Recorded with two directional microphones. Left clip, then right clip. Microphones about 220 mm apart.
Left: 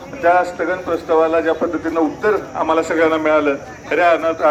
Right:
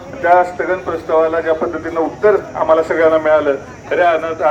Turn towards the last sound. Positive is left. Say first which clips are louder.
# even
turn(degrees=50)  # may be behind; listen again after turning